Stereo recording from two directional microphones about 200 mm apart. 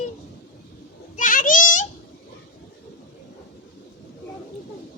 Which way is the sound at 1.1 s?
40° left (ahead or behind).